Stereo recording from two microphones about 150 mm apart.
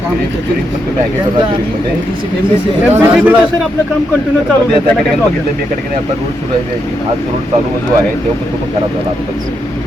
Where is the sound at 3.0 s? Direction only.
10° right (ahead or behind).